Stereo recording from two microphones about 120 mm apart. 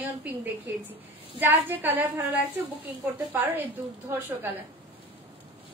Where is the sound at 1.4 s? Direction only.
15° right (ahead or behind).